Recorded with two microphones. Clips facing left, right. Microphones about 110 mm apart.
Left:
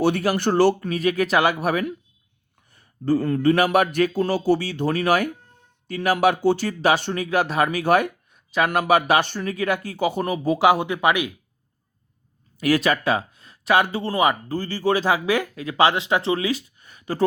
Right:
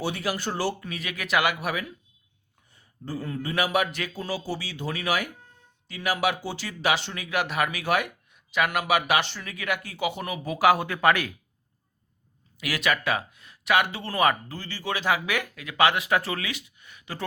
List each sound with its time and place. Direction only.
0.0 s a man's voice: 55° left (ahead or behind)
0.9 s speech: 40° left (ahead or behind)
2.7 s a man's voice: 70° left (ahead or behind)
6.8 s speech: 45° left (ahead or behind); by 11.3 s 15° left (ahead or behind)
12.5 s speech: 40° left (ahead or behind); by 14.3 s 20° left (ahead or behind)
14.4 s speech: 40° left (ahead or behind)